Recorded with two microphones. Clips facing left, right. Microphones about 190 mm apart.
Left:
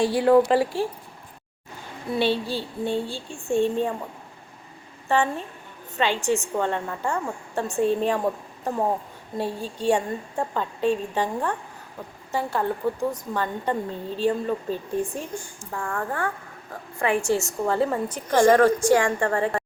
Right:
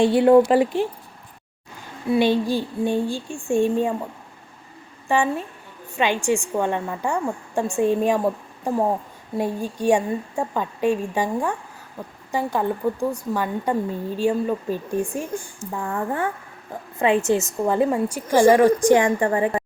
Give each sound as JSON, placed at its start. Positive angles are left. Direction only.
{"t": 0.0, "sound": "speech", "side_deg": -25}
{"t": 2.1, "sound": "a woman's voice", "side_deg": -15}
{"t": 5.0, "sound": "a woman's voice", "side_deg": -15}